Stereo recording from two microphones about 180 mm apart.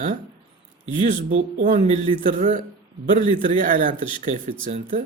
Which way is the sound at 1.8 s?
45° right (ahead or behind).